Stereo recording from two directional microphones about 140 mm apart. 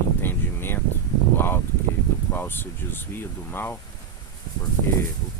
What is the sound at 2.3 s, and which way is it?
Speech, 15° left (ahead or behind).